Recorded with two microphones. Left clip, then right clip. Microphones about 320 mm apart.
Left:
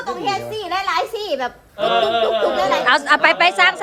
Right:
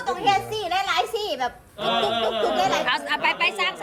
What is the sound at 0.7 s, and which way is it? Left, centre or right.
Speech, centre.